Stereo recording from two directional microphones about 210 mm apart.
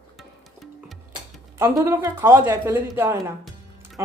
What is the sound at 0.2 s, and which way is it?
Music, centre (ahead or behind).